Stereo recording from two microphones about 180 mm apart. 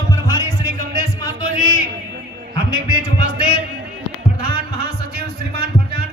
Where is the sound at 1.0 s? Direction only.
20° left (ahead or behind).